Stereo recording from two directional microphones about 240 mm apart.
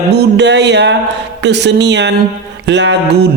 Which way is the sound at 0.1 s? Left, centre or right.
Right.